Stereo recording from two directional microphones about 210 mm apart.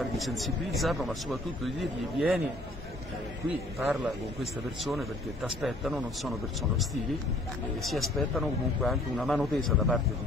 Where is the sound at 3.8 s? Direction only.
Centre (ahead or behind).